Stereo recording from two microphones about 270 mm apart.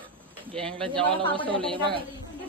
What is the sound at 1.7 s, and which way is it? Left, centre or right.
Speech, centre.